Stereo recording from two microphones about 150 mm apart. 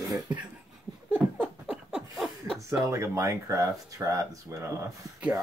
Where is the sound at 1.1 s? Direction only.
5° right (ahead or behind).